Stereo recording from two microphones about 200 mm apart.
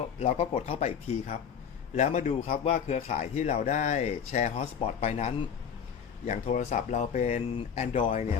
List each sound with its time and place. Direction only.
0.2 s a man's voice: 30° left (ahead or behind)